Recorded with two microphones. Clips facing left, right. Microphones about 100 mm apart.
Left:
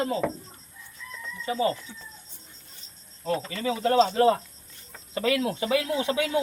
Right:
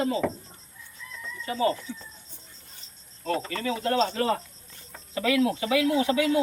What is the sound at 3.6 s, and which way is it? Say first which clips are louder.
Speech: left 5 dB; 25° left (ahead or behind).